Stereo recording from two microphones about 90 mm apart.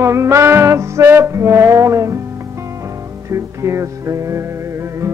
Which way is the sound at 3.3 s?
35° right (ahead or behind).